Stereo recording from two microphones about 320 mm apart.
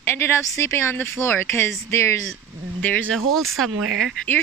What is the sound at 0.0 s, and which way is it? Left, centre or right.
Speech, centre.